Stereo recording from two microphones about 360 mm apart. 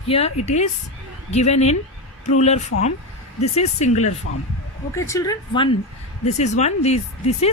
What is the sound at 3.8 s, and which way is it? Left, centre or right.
Speech, centre.